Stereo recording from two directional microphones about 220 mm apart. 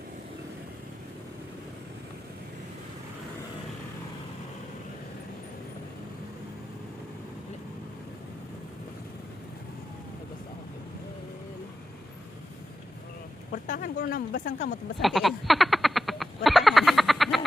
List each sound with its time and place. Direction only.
13.5 s speech: 40° left (ahead or behind)
15.0 s frog: centre (ahead or behind)